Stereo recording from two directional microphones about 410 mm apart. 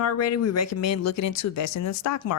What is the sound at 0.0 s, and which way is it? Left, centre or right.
Speech, left.